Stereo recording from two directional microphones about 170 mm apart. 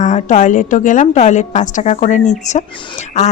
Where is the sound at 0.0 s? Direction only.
45° left (ahead or behind).